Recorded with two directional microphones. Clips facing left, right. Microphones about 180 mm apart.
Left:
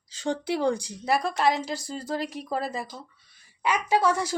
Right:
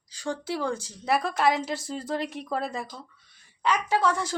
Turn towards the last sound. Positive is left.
turn(degrees=10)  # may be behind; listen again after turning